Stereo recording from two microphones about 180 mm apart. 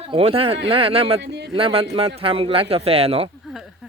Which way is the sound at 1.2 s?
70° right (ahead or behind).